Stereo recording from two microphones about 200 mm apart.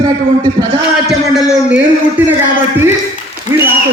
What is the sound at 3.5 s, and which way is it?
Speech, 35° left (ahead or behind).